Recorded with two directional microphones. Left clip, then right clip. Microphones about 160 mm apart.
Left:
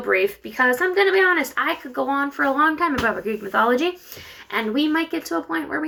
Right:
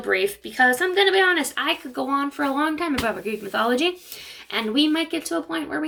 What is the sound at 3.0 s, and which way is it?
Speech, 30° right (ahead or behind).